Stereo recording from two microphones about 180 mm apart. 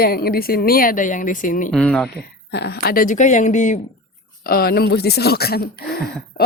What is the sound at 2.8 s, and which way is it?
Speech, 50° left (ahead or behind).